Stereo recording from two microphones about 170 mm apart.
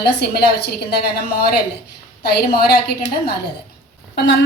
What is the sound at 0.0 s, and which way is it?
A woman's voice, 75° left (ahead or behind).